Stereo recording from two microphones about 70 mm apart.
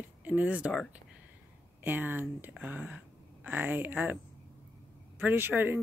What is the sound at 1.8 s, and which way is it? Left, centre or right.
Speech, right.